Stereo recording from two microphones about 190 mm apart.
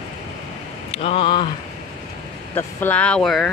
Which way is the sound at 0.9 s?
30° left (ahead or behind).